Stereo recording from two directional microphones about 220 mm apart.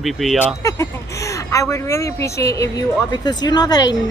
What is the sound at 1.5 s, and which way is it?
Speech, 15° left (ahead or behind).